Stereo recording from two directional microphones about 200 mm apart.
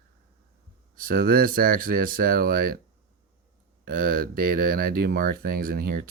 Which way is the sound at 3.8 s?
45° right (ahead or behind).